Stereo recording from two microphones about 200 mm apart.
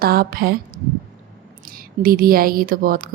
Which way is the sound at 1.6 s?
45° right (ahead or behind).